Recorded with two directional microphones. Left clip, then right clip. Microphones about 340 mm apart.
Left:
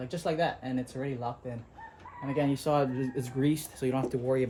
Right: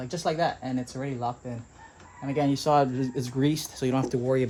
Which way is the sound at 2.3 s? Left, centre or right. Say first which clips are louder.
Right 4 dB; right.